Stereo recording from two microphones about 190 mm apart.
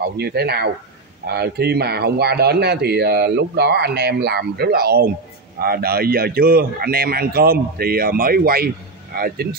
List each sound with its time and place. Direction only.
0.2 s a man's voice: 55° right (ahead or behind)